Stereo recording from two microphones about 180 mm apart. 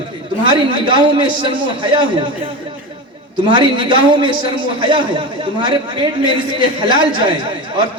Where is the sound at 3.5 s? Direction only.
25° right (ahead or behind).